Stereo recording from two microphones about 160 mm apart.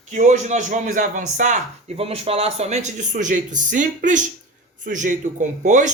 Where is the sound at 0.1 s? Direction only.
50° right (ahead or behind).